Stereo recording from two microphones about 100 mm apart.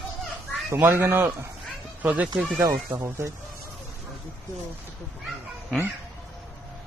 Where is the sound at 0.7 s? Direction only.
25° right (ahead or behind).